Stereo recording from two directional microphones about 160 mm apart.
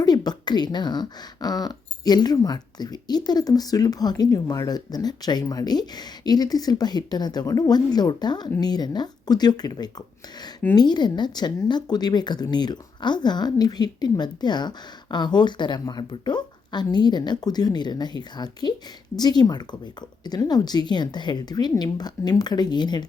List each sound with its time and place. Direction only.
0.0 s speech: 25° left (ahead or behind)